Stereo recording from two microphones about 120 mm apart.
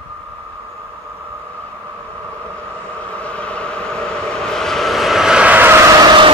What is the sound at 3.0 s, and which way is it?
Train, 10° left (ahead or behind).